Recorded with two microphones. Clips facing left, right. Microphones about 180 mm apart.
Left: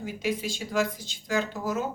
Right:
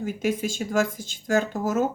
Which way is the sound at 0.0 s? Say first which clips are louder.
Right 4 dB; 50° right (ahead or behind).